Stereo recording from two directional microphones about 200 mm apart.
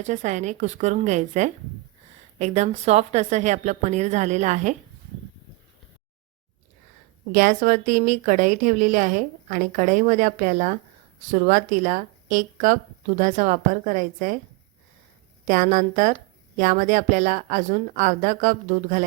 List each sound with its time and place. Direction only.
0.1 s a woman's voice: 35° right (ahead or behind)
7.3 s a woman's voice: 40° right (ahead or behind)
15.4 s a woman's voice: 40° right (ahead or behind)